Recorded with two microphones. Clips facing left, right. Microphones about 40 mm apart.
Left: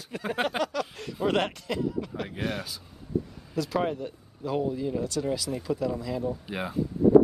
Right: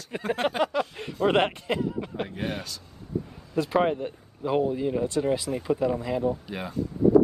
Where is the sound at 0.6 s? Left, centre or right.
Right.